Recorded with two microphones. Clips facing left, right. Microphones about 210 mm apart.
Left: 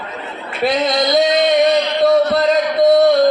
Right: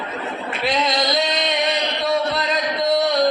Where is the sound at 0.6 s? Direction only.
50° left (ahead or behind).